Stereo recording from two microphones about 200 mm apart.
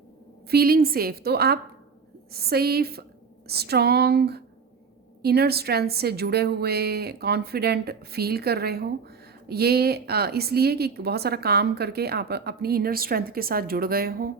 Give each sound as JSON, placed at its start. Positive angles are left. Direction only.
{"t": 0.5, "sound": "a woman's voice", "side_deg": -50}